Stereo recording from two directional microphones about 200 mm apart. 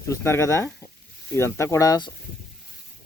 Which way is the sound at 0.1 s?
15° left (ahead or behind).